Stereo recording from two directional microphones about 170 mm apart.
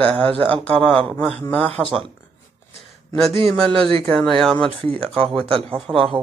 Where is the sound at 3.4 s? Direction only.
Centre (ahead or behind).